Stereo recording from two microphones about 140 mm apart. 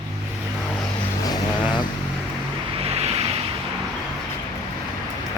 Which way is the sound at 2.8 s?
45° right (ahead or behind).